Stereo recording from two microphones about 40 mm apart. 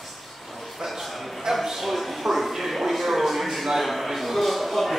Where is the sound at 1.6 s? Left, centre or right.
Centre.